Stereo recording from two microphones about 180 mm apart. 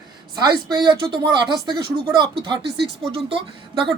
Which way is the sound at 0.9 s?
25° right (ahead or behind).